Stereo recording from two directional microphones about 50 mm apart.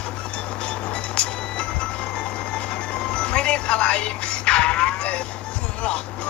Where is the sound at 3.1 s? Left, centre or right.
Left.